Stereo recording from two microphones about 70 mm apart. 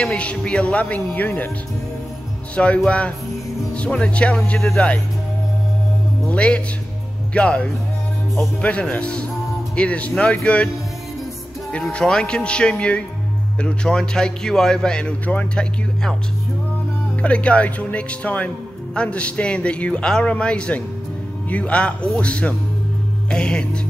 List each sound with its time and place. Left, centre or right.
0.0 s a man's voice: centre
2.5 s a man's voice: centre
6.2 s a man's voice: centre
11.7 s a man's voice: centre
17.2 s a man's voice: centre